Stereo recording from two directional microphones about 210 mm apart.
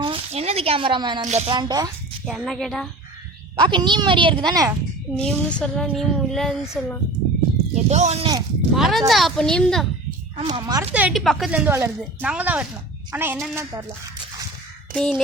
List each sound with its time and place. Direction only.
0.0 s a sound: 25° right (ahead or behind)
1.2 s speech: 30° right (ahead or behind)
1.5 s speech: 20° right (ahead or behind)
2.2 s speech: centre (ahead or behind)
3.5 s speech: 20° right (ahead or behind)
5.1 s speech: 5° left (ahead or behind)
7.9 s speech: 35° right (ahead or behind)
8.7 s speech: centre (ahead or behind)
10.3 s speech: 25° right (ahead or behind); by 13.6 s 5° right (ahead or behind)
14.9 s speech: 5° left (ahead or behind)